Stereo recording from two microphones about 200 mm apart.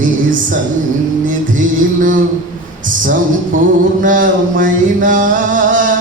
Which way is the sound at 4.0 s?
40° right (ahead or behind).